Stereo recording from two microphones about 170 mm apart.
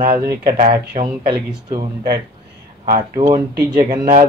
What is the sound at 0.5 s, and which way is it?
Speech, 30° right (ahead or behind).